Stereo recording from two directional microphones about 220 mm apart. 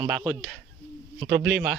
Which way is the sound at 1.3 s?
50° right (ahead or behind).